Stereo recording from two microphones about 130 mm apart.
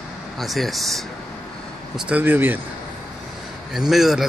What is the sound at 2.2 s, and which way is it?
Speech, 15° right (ahead or behind).